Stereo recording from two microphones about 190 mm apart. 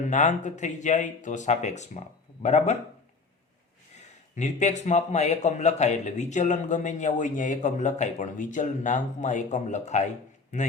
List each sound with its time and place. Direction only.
0.1 s a man's voice: 40° left (ahead or behind)
4.4 s a man's voice: 40° left (ahead or behind)